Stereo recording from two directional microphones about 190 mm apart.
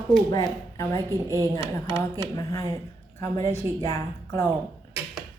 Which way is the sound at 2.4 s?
15° left (ahead or behind).